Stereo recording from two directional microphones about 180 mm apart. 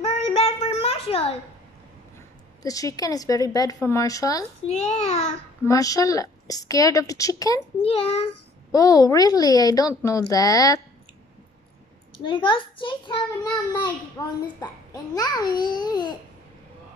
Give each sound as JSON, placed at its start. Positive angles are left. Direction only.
{"t": 0.0, "sound": "child singing", "side_deg": 35}
{"t": 2.6, "sound": "a woman's voice", "side_deg": 20}
{"t": 5.7, "sound": "a woman's voice", "side_deg": 20}
{"t": 7.8, "sound": "a child's voice", "side_deg": 30}
{"t": 8.7, "sound": "a woman's voice", "side_deg": 20}
{"t": 12.3, "sound": "a woman's voice", "side_deg": 30}